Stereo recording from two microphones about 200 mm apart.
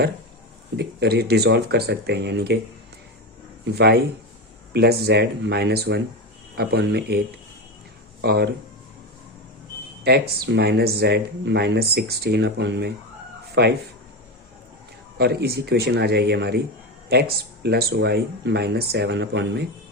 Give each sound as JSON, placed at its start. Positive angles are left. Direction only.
{"t": 0.8, "sound": "speech", "side_deg": -55}
{"t": 3.8, "sound": "speech", "side_deg": -50}
{"t": 8.2, "sound": "speech", "side_deg": -55}
{"t": 10.0, "sound": "speech", "side_deg": -50}
{"t": 15.2, "sound": "speech", "side_deg": -55}